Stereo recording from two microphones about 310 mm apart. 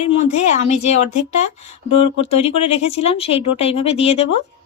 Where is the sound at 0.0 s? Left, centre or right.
Left.